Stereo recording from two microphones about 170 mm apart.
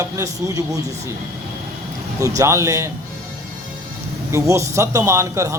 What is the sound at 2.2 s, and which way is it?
Speech, 20° right (ahead or behind).